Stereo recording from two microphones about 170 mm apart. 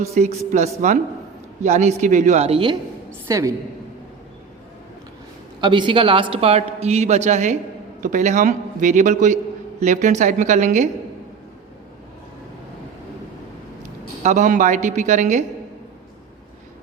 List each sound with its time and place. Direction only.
0.0 s a man's voice: 40° right (ahead or behind)
3.2 s a woman's voice: 20° right (ahead or behind)
5.5 s a man's voice: 30° right (ahead or behind); by 10.8 s 45° right (ahead or behind)
14.3 s a man's voice: 45° right (ahead or behind)